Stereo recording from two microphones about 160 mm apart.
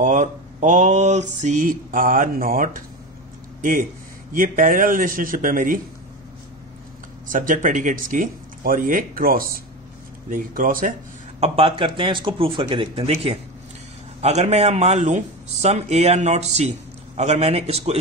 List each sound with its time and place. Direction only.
0.0 s speech: 45° right (ahead or behind)
4.3 s speech: 60° right (ahead or behind)
7.2 s speech: 55° right (ahead or behind)
11.4 s speech: 35° right (ahead or behind)